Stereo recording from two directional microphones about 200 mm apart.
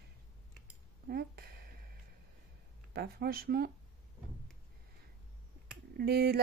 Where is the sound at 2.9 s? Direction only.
55° right (ahead or behind).